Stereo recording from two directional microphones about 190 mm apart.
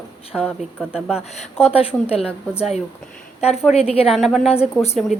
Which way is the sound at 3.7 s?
35° left (ahead or behind).